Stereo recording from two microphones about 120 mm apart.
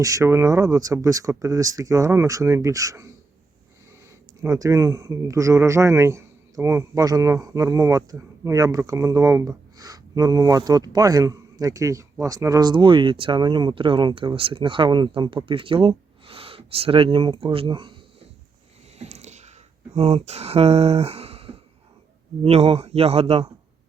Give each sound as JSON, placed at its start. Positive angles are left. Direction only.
{"t": 0.0, "sound": "speech", "side_deg": -25}
{"t": 4.4, "sound": "speech", "side_deg": -30}
{"t": 18.9, "sound": "a sound", "side_deg": -70}
{"t": 20.0, "sound": "speech", "side_deg": -55}